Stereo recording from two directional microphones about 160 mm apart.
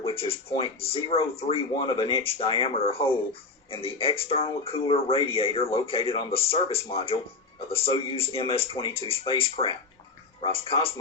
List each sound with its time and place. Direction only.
0.0 s speech: 35° left (ahead or behind)